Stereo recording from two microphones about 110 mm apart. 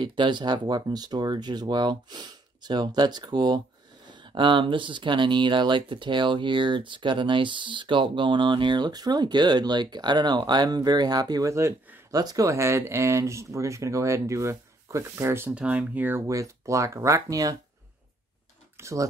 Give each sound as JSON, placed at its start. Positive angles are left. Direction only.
{"t": 0.0, "sound": "speech", "side_deg": -45}
{"t": 15.5, "sound": "speech", "side_deg": -15}
{"t": 16.3, "sound": "speech", "side_deg": -30}
{"t": 18.8, "sound": "speech", "side_deg": -25}